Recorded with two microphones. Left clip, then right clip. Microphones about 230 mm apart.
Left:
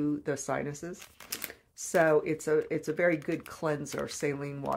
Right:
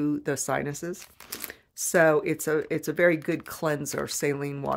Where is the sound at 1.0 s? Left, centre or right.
Centre.